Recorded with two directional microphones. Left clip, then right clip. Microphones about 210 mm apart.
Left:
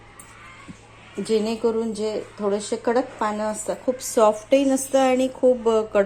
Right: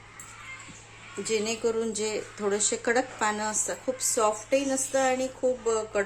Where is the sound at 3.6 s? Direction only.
10° left (ahead or behind).